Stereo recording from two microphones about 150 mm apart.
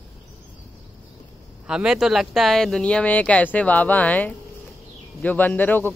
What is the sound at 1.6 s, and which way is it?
Speech, 5° right (ahead or behind).